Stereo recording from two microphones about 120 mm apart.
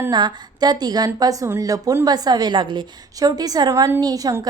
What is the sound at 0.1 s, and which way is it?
A woman's voice, 40° right (ahead or behind).